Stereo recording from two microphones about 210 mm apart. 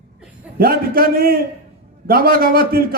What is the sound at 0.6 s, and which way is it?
A man's voice, 45° right (ahead or behind).